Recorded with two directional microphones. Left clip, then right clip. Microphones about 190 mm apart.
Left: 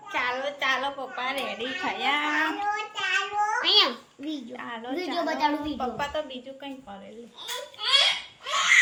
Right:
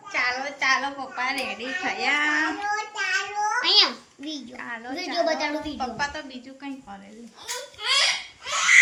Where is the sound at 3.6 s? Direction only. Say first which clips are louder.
Right 3 dB; 20° left (ahead or behind).